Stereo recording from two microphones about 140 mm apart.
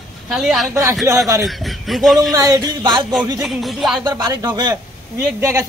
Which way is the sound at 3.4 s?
Centre (ahead or behind).